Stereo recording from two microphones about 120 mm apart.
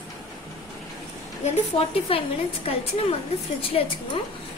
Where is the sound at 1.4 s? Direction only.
50° left (ahead or behind).